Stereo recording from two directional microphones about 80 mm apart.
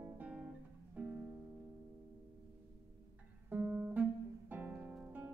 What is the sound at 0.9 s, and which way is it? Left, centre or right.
Music, centre.